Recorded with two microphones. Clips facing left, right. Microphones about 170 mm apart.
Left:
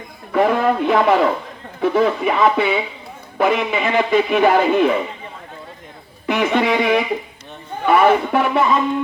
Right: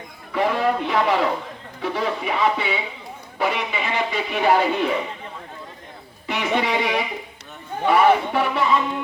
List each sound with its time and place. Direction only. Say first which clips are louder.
0.3 s speech: left 5 dB; 50° left (ahead or behind)
6.2 s speech: left 6 dB; 50° left (ahead or behind)